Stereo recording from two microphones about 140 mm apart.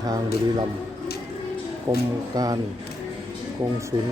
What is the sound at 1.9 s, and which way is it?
Speech, 20° right (ahead or behind).